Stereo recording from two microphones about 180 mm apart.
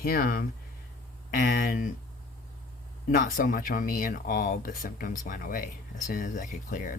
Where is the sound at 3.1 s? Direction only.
50° left (ahead or behind).